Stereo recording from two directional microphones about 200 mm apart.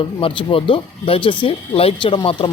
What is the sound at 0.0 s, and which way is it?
Speech, 25° left (ahead or behind).